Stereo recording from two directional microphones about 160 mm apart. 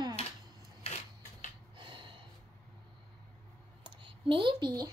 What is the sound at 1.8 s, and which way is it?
Gasp, 30° right (ahead or behind).